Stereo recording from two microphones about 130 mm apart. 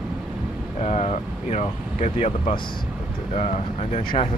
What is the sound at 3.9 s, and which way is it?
Speech, 50° left (ahead or behind).